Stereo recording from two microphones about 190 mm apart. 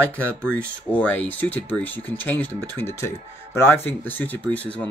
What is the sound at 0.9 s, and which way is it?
Speech, 10° left (ahead or behind).